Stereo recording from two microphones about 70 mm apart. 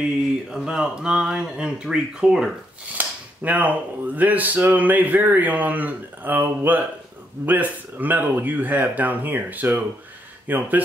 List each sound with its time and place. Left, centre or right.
0.5 s speech: centre
2.9 s speech: right